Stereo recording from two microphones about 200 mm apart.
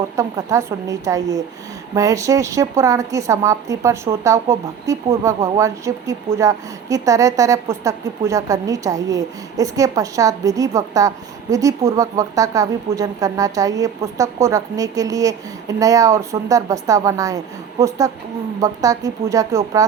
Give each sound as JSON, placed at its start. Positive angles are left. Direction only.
{"t": 0.2, "sound": "a woman's voice", "side_deg": -15}